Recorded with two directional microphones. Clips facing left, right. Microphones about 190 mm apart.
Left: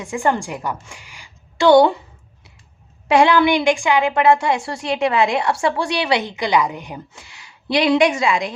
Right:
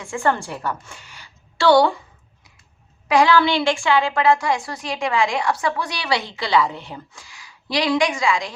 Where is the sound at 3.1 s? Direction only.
25° left (ahead or behind).